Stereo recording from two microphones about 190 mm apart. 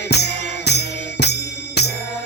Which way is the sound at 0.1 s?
60° left (ahead or behind).